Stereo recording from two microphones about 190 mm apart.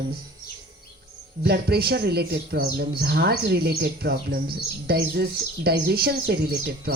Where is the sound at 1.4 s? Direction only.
55° right (ahead or behind).